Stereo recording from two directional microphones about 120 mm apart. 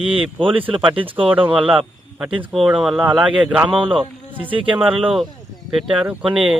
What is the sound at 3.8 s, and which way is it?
Speech, 45° right (ahead or behind).